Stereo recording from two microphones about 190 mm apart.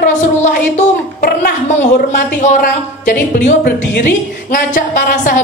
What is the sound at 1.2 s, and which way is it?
A woman's voice, 50° left (ahead or behind).